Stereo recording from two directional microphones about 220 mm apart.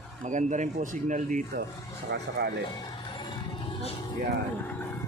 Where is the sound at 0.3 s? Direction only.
35° right (ahead or behind).